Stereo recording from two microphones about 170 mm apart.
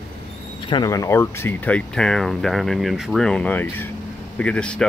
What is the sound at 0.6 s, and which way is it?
Speech, 25° left (ahead or behind).